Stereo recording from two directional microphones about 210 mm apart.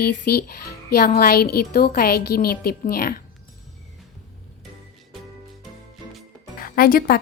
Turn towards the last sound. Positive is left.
turn(degrees=45)  # may be behind; listen again after turning